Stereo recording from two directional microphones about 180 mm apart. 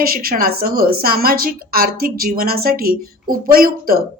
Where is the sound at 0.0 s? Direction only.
55° right (ahead or behind).